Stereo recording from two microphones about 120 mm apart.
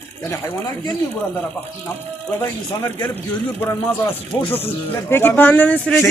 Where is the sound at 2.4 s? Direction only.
25° left (ahead or behind).